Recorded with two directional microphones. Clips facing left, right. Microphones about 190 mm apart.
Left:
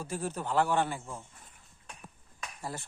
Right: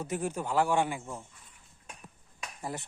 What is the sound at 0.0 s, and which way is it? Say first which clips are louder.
Speech: right 2 dB; 20° right (ahead or behind).